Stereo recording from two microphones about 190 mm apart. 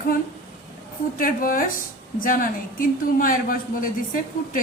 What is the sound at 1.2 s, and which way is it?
A woman's voice, 50° left (ahead or behind).